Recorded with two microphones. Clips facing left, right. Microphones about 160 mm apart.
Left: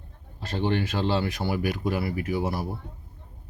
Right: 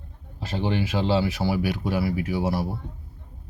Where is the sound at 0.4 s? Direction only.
10° right (ahead or behind).